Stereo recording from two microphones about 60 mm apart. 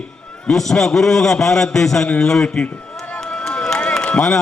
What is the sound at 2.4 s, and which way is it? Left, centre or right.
Speech, left.